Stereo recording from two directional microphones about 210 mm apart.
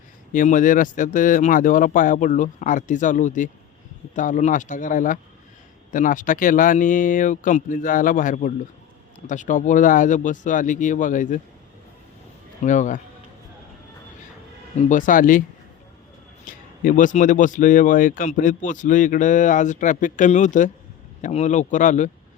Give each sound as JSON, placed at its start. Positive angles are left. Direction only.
{"t": 0.3, "sound": "speech", "side_deg": 40}
{"t": 12.6, "sound": "speech", "side_deg": 35}
{"t": 14.8, "sound": "speech", "side_deg": 40}
{"t": 16.5, "sound": "speech", "side_deg": 40}